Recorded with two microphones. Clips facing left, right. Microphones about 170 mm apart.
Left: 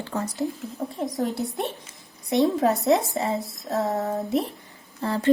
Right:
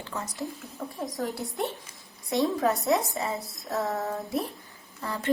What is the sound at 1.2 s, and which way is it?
A woman's voice, 20° left (ahead or behind).